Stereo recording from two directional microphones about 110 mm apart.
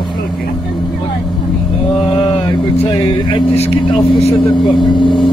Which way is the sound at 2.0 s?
50° left (ahead or behind).